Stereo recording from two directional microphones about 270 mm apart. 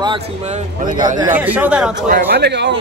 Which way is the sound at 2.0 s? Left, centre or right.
Right.